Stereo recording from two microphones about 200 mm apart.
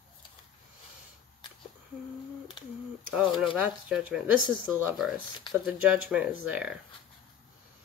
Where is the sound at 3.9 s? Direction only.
5° right (ahead or behind).